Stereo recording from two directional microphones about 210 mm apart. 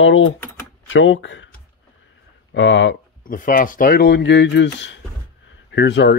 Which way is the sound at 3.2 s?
40° left (ahead or behind).